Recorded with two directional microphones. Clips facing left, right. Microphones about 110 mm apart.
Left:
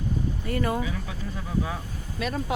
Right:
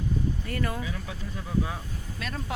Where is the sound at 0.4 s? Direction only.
20° left (ahead or behind).